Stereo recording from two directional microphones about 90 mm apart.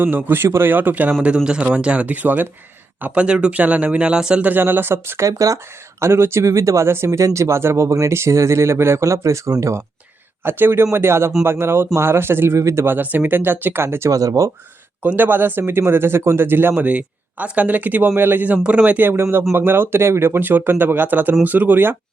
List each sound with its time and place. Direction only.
0.0 s speech: 20° right (ahead or behind)
10.4 s speech: 25° right (ahead or behind)
15.0 s speech: 20° right (ahead or behind)